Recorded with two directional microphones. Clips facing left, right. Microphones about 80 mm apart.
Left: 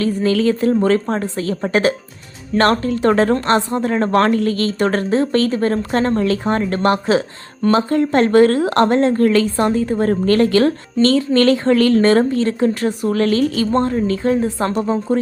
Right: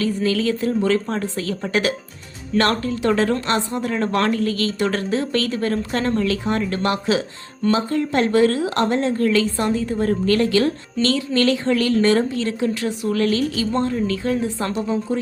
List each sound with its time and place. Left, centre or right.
0.0 s a woman's voice: left